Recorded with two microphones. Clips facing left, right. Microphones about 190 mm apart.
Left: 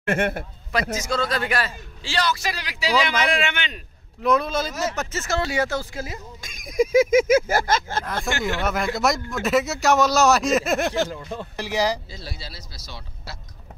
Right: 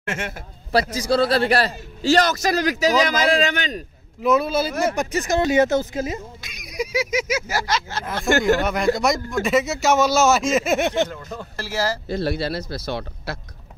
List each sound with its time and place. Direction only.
0.0 s a man's voice: 55° left (ahead or behind)
0.7 s a man's voice: 35° right (ahead or behind)
4.2 s a man's voice: 5° right (ahead or behind); by 6.1 s 20° right (ahead or behind)
6.4 s speech: 50° left (ahead or behind)
8.3 s speech: 45° right (ahead or behind)
8.6 s speech: centre (ahead or behind)
11.5 s speech: 15° left (ahead or behind)
12.1 s speech: 60° right (ahead or behind)